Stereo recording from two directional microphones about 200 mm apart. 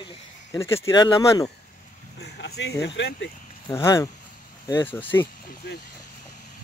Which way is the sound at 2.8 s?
60° left (ahead or behind).